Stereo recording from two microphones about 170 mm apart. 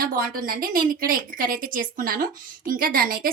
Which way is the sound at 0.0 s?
55° right (ahead or behind).